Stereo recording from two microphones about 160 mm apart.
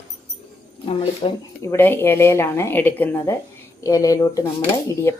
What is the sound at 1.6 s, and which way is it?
Speech, 15° left (ahead or behind).